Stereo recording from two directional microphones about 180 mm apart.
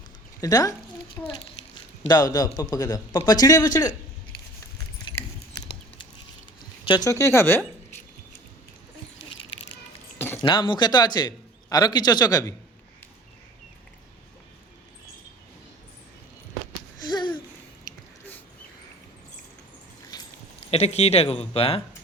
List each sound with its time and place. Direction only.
0.4 s a man's voice: 20° left (ahead or behind)
2.0 s a man's voice: 20° left (ahead or behind)
6.8 s speech: 25° left (ahead or behind)
10.4 s a man's voice: 25° left (ahead or behind)
17.1 s a sound: 25° left (ahead or behind)
20.1 s a sound: 25° left (ahead or behind)
20.7 s speech: 35° left (ahead or behind)